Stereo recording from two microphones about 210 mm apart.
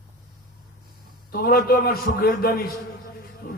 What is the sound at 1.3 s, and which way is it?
A man's voice, 45° left (ahead or behind).